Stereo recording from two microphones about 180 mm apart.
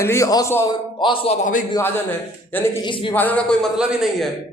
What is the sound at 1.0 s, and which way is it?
Speech, 30° left (ahead or behind).